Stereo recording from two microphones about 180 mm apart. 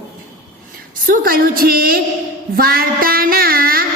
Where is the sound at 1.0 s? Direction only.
50° right (ahead or behind).